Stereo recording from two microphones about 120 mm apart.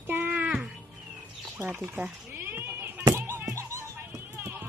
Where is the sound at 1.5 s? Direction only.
15° right (ahead or behind).